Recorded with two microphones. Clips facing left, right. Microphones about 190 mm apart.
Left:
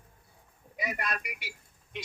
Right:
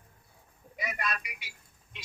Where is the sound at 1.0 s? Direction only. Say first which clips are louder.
Even; 55° left (ahead or behind).